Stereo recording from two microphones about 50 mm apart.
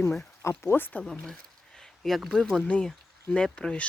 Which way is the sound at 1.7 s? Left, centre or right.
Centre.